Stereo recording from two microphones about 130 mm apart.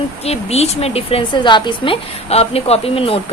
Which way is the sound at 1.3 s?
35° left (ahead or behind).